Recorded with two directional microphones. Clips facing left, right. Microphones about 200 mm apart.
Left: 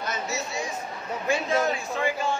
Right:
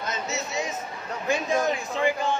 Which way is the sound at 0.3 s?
20° right (ahead or behind).